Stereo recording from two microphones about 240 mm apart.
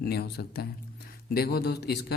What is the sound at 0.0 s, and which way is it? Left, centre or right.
Speech, left.